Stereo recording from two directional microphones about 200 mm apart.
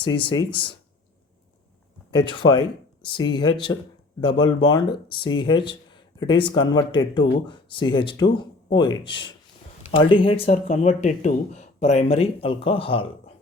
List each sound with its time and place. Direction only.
0.0 s speech: 25° left (ahead or behind)
2.0 s speech: 25° left (ahead or behind)